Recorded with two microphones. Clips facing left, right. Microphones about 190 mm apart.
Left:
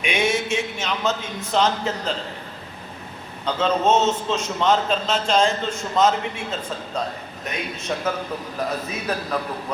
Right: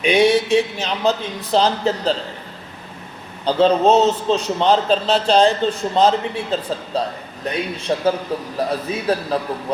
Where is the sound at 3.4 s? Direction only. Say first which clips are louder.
Right 6 dB; 35° right (ahead or behind).